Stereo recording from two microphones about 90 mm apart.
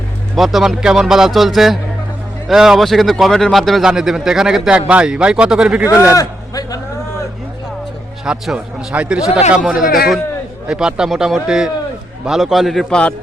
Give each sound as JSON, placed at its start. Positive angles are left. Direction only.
{"t": 0.3, "sound": "speech", "side_deg": -5}
{"t": 6.1, "sound": "a sound", "side_deg": 40}
{"t": 8.2, "sound": "a man's voice", "side_deg": -10}